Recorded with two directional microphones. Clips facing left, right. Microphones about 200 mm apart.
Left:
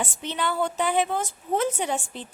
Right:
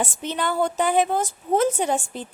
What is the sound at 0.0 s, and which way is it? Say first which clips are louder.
A woman's voice: right 3 dB; 45° right (ahead or behind).